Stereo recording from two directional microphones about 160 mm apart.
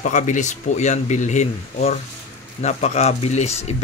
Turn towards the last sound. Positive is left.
turn(degrees=40)  # may be behind; listen again after turning